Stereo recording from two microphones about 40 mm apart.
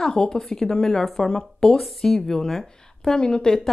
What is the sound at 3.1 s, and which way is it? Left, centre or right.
Speech, centre.